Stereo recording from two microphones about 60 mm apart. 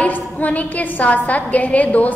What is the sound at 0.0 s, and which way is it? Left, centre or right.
A woman's voice, left.